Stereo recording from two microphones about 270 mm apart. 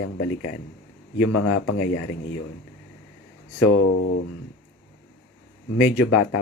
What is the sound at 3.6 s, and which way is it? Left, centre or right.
Speech, left.